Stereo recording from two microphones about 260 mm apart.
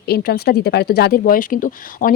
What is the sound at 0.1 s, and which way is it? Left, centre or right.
Speech, left.